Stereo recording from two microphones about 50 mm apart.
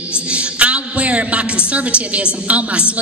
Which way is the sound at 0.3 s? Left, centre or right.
Right.